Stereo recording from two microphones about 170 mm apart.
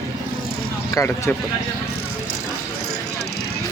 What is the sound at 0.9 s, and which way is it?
Speech, 15° left (ahead or behind).